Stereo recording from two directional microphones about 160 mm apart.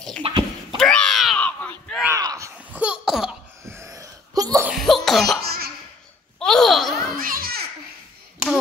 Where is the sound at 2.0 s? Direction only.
20° right (ahead or behind).